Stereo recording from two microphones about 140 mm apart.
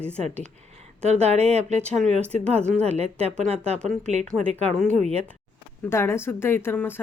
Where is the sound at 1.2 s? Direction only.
50° right (ahead or behind).